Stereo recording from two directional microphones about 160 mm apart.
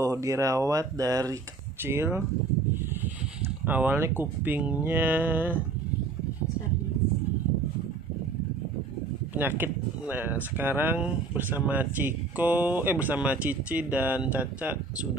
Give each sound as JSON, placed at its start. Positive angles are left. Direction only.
{"t": 0.0, "sound": "speech", "side_deg": -20}
{"t": 3.4, "sound": "speech", "side_deg": -10}
{"t": 9.6, "sound": "speech", "side_deg": -10}